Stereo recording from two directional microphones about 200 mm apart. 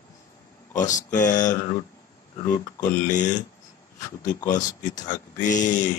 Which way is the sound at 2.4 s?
40° left (ahead or behind).